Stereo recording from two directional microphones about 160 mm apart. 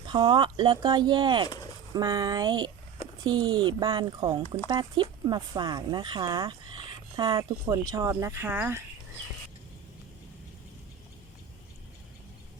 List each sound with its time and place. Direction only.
0.1 s speech: 30° right (ahead or behind); by 8.8 s 10° right (ahead or behind)